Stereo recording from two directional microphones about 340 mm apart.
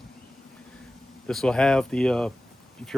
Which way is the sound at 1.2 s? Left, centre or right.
Centre.